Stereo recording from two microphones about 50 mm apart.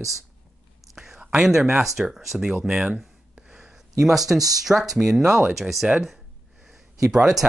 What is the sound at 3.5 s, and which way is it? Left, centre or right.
Speech, centre.